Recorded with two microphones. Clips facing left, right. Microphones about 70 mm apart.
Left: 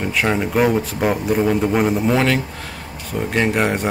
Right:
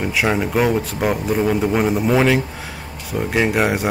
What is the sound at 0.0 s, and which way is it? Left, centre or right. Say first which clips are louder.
Speech: even; centre.